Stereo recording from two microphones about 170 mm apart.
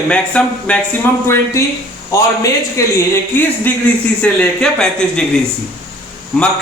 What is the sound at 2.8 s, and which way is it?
A man's voice, 20° left (ahead or behind).